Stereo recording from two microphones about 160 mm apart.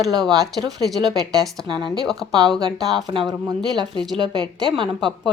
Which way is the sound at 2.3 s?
25° right (ahead or behind).